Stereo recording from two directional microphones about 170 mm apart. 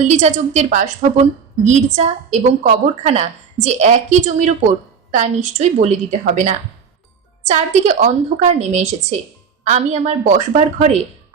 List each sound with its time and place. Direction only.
0.0 s a woman's voice: 45° right (ahead or behind)